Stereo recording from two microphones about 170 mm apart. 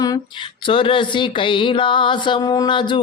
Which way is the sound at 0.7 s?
30° left (ahead or behind).